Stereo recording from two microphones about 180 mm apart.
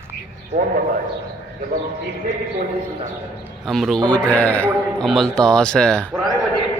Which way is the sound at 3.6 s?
Centre (ahead or behind).